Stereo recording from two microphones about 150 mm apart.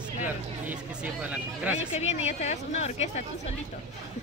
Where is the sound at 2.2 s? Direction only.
50° left (ahead or behind).